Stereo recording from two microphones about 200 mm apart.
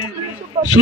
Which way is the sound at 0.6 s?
30° right (ahead or behind).